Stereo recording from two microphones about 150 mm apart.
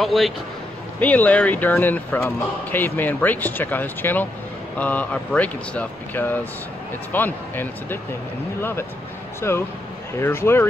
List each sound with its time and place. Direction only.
0.0 s a man's voice: centre (ahead or behind)
0.9 s speech: 10° left (ahead or behind)